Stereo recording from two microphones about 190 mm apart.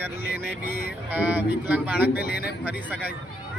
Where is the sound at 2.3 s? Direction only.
55° left (ahead or behind).